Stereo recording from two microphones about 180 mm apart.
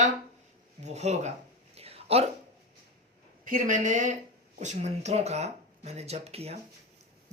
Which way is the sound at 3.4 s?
45° right (ahead or behind).